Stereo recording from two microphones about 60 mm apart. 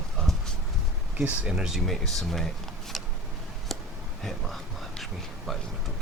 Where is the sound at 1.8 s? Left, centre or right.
Centre.